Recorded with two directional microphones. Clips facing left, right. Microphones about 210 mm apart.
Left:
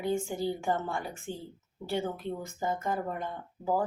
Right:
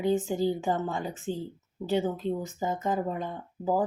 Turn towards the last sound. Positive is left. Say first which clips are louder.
# right 2 dB
turn(degrees=-15)  # may be behind; listen again after turning